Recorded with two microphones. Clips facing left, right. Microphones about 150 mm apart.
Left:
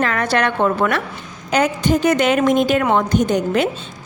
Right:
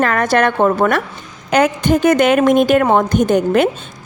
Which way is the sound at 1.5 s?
55° right (ahead or behind).